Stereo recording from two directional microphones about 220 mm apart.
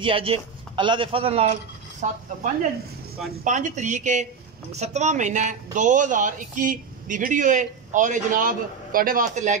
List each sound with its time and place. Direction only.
0.0 s speech: 25° right (ahead or behind)
3.4 s speech: 35° right (ahead or behind)